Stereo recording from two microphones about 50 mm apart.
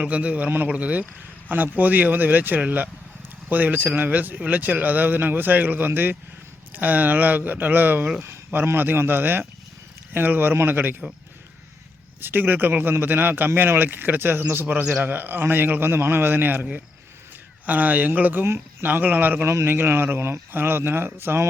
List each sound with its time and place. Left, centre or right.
0.0 s a man's voice: right
12.2 s a man's voice: right
14.7 s speech: right
14.9 s a man's voice: right
17.7 s speech: right
18.4 s speech: right
18.9 s speech: right
19.5 s a man's voice: right